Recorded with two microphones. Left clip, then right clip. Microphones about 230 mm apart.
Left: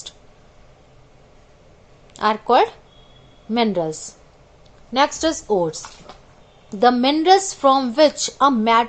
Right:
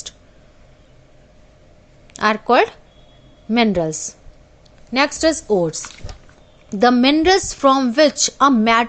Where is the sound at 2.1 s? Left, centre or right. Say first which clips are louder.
Right 1 dB; right.